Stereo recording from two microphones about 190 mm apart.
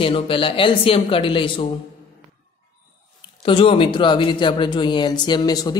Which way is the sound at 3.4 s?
30° left (ahead or behind).